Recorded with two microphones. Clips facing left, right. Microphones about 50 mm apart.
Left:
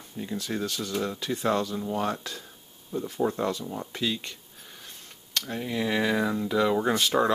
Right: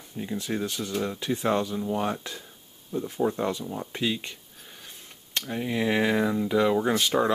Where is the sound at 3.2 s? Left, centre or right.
Centre.